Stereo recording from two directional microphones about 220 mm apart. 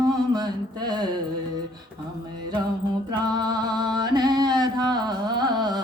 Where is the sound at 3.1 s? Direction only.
20° right (ahead or behind).